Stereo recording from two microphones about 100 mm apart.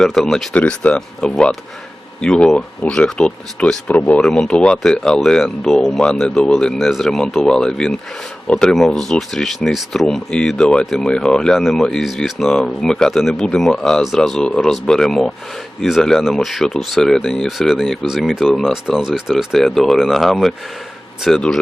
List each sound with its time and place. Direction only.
0.0 s speech: 5° left (ahead or behind)